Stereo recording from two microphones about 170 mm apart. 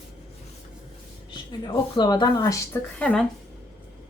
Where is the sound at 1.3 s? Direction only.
25° left (ahead or behind).